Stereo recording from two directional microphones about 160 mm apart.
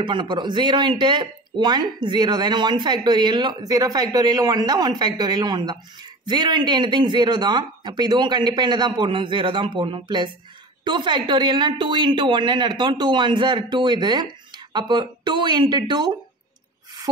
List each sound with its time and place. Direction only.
0.0 s speech: 30° right (ahead or behind)